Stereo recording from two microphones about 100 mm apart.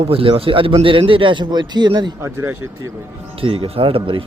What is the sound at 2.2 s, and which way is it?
Speech, 25° right (ahead or behind).